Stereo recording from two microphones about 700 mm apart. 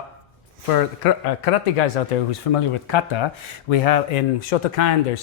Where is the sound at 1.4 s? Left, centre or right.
Left.